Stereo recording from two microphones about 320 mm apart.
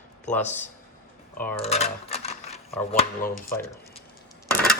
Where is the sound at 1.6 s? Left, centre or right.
Centre.